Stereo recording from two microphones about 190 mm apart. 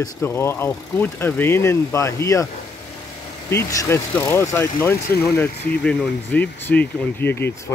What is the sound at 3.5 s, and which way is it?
Speech, 15° left (ahead or behind).